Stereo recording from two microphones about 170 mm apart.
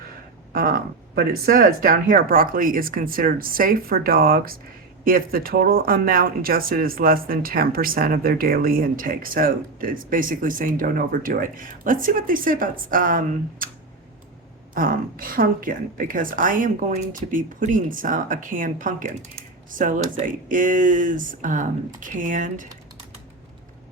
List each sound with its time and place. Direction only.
0.5 s speech: 55° right (ahead or behind)
14.8 s a woman's voice: 55° right (ahead or behind)